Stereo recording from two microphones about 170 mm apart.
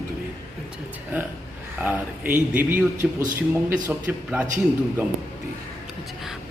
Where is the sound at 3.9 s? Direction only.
10° right (ahead or behind).